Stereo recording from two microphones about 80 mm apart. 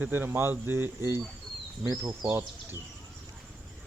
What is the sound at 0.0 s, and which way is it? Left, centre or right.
Speech, right.